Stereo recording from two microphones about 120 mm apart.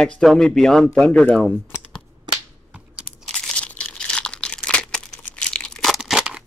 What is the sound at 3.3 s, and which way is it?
Crumpling, 10° left (ahead or behind).